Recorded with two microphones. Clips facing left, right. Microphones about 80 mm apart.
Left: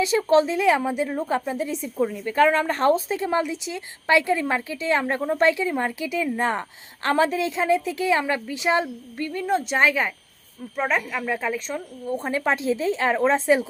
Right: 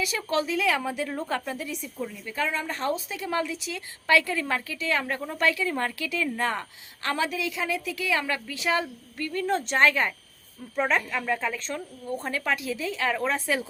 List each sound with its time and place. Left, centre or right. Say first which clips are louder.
0.0 s speech: left 9 dB; left
1.6 s a woman's voice: left 7 dB; left
2.0 s a woman's voice: left 12 dB; left
7.0 s a woman's voice: left 7 dB; left; by 12.1 s centre
12.1 s speech: left 5 dB; left